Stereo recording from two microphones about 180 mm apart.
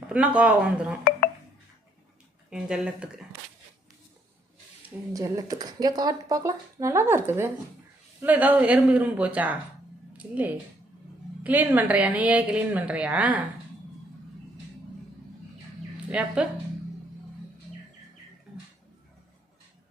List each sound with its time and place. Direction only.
0.1 s speech: 5° right (ahead or behind)
2.5 s speech: 5° right (ahead or behind)
4.8 s speech: 15° right (ahead or behind)
10.1 s a sound: 10° right (ahead or behind)
11.4 s speech: 10° right (ahead or behind)
16.0 s speech: 5° right (ahead or behind)